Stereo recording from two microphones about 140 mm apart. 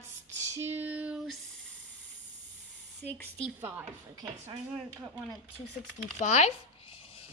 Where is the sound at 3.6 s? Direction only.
15° right (ahead or behind).